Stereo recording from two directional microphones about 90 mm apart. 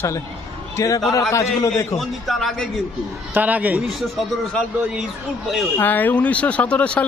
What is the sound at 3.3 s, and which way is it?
Speech, 15° right (ahead or behind).